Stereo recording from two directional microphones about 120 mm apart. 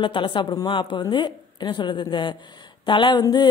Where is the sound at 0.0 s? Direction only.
40° left (ahead or behind).